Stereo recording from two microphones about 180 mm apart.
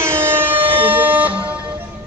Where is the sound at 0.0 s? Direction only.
15° right (ahead or behind).